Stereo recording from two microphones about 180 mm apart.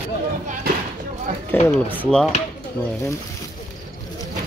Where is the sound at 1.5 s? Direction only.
10° left (ahead or behind).